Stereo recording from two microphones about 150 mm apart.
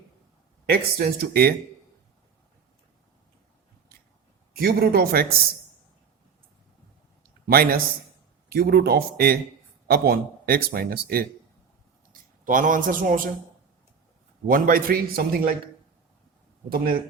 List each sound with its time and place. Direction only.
0.7 s a man's voice: 90° right
4.5 s a man's voice: 90° right
7.4 s a man's voice: 80° right
12.1 s speech: 60° right (ahead or behind)
14.4 s a man's voice: 70° right (ahead or behind); by 15.5 s 85° right
16.6 s a man's voice: 75° right (ahead or behind)